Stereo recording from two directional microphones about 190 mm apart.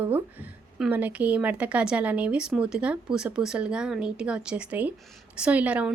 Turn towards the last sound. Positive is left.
turn(degrees=-5)  # may be behind; listen again after turning